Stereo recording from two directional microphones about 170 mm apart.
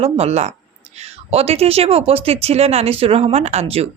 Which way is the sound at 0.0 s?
40° right (ahead or behind).